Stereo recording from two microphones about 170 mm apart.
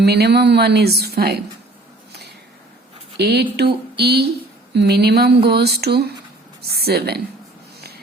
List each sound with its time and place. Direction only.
0.0 s speech: 70° right (ahead or behind)
3.2 s speech: 75° right (ahead or behind)